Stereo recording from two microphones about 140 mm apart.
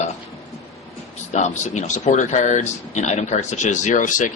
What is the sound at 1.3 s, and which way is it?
Speech, 55° left (ahead or behind).